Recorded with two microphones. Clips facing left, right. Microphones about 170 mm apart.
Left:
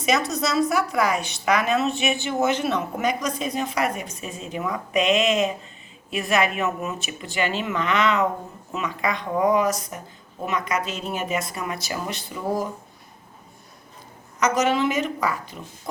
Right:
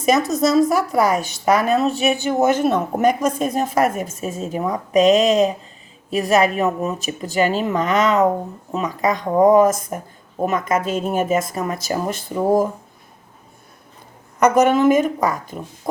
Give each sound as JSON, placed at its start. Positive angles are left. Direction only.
{"t": 0.0, "sound": "a woman's voice", "side_deg": -45}
{"t": 14.3, "sound": "a woman's voice", "side_deg": -55}